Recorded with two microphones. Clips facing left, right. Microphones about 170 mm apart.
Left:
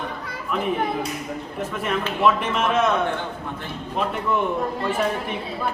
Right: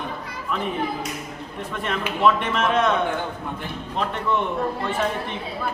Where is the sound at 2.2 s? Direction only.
5° left (ahead or behind).